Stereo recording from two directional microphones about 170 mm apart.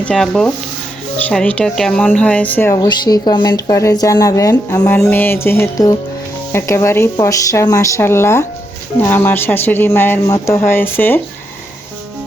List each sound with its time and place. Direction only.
0.0 s speech: 5° left (ahead or behind)
2.7 s speech: 25° left (ahead or behind)